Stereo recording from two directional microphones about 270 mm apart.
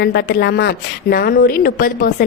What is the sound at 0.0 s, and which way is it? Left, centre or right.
A woman's voice, left.